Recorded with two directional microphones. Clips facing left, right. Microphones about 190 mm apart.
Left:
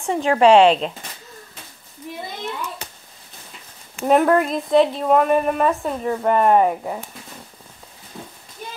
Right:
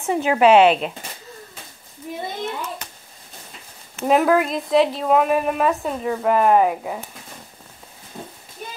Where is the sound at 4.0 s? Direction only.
Centre (ahead or behind).